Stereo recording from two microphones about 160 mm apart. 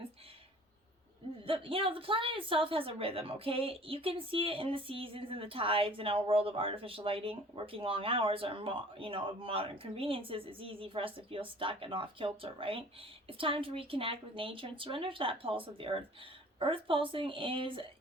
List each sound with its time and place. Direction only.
1.5 s a woman's voice: 35° right (ahead or behind)